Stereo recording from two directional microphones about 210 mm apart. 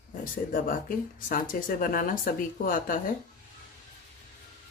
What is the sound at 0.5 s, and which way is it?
Speech, 40° left (ahead or behind).